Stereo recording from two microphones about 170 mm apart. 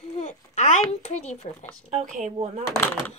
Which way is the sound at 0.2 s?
40° left (ahead or behind).